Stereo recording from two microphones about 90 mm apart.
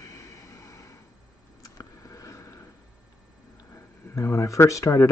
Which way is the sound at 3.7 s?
30° left (ahead or behind).